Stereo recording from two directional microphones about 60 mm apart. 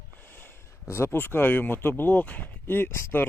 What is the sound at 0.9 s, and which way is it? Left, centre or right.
Speech, left.